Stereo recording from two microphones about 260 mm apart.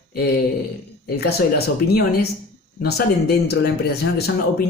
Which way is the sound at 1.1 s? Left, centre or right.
Left.